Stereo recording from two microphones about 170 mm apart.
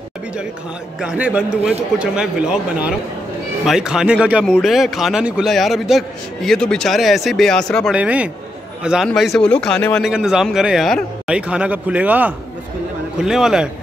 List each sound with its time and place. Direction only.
1.0 s a man's voice: 10° right (ahead or behind)
7.9 s a man's voice: 10° right (ahead or behind)